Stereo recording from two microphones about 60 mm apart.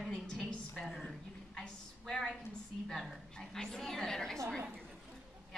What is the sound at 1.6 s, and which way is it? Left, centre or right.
Speech, centre.